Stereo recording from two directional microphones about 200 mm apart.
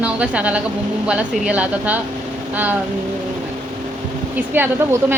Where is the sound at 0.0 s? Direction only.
5° right (ahead or behind).